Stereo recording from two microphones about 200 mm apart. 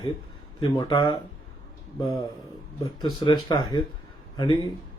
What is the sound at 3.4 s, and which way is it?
Speech, 20° left (ahead or behind).